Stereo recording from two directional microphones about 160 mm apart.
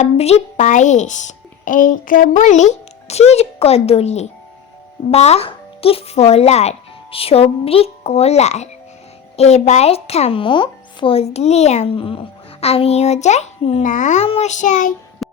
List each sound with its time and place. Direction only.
0.0 s a woman's voice: 40° left (ahead or behind)
15.2 s music: centre (ahead or behind)